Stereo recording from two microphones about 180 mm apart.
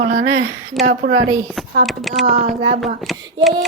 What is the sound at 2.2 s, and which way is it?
Speech, 35° right (ahead or behind).